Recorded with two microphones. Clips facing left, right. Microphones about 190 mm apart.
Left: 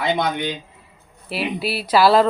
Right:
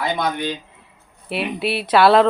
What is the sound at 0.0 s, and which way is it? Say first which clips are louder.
Speech: left 1 dB; 20° left (ahead or behind).